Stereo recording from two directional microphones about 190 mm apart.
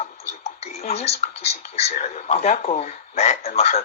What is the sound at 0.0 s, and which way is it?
Tick-tock, 35° left (ahead or behind).